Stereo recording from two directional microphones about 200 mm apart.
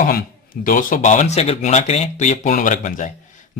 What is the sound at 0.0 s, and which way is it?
A man's voice, 45° left (ahead or behind).